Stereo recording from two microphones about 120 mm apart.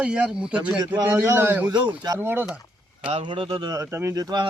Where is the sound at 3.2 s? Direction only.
45° right (ahead or behind).